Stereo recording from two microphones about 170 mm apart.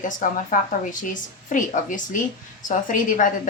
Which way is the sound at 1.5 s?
50° left (ahead or behind).